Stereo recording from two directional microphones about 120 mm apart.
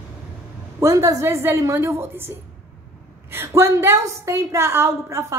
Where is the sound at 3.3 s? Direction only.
20° right (ahead or behind).